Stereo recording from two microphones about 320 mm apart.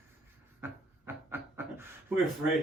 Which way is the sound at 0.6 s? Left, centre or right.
Centre.